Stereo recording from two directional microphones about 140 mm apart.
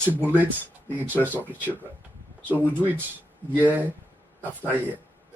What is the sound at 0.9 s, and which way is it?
Speech, 10° right (ahead or behind).